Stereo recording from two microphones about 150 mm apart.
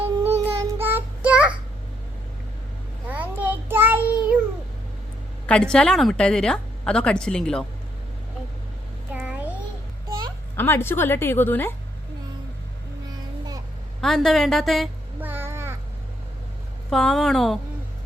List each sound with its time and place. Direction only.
0.4 s child singing: 15° right (ahead or behind)
3.1 s child singing: 10° right (ahead or behind)
5.5 s a woman's voice: 5° left (ahead or behind)
9.1 s babbling: 10° right (ahead or behind)
10.1 s a sound: 30° right (ahead or behind)
10.5 s a woman's voice: 15° left (ahead or behind)
14.0 s a woman's voice: 5° left (ahead or behind)
15.2 s a sound: 15° right (ahead or behind)
16.9 s a woman's voice: 5° left (ahead or behind)